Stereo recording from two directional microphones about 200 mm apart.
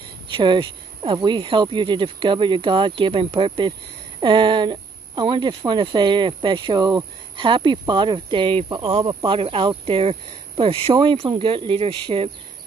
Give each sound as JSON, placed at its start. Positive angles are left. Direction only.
{"t": 0.3, "sound": "speech", "side_deg": -25}